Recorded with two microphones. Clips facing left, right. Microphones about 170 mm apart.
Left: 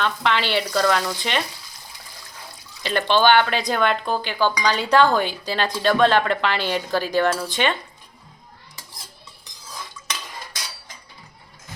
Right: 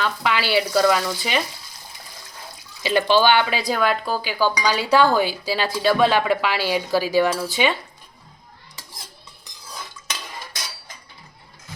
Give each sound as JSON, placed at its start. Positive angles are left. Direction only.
{"t": 0.0, "sound": "frying", "side_deg": -5}
{"t": 2.8, "sound": "speech", "side_deg": -10}